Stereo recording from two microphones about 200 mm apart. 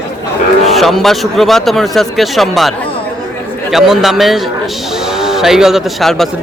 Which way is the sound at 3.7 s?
Centre (ahead or behind).